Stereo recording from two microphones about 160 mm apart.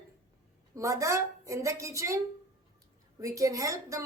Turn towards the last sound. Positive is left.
turn(degrees=-20)  # may be behind; listen again after turning